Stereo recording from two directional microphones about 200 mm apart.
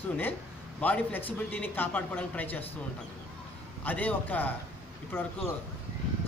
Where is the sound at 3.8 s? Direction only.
10° left (ahead or behind).